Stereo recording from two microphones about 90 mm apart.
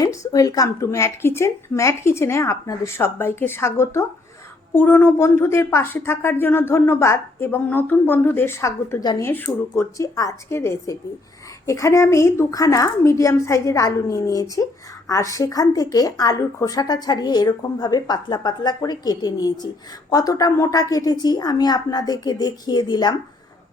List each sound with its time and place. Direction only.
0.0 s a woman's voice: 40° left (ahead or behind)
0.9 s a woman's voice: 30° left (ahead or behind)
9.0 s speech: 45° left (ahead or behind)
9.2 s speech: 25° left (ahead or behind)
10.0 s a woman's voice: 40° left (ahead or behind)
10.5 s a woman's voice: 30° left (ahead or behind); by 23.1 s 55° left (ahead or behind)